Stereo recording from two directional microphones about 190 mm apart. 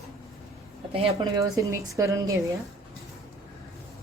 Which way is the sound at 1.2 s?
15° right (ahead or behind).